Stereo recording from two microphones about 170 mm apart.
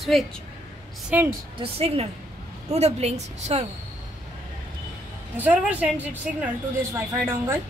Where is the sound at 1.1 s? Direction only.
10° right (ahead or behind).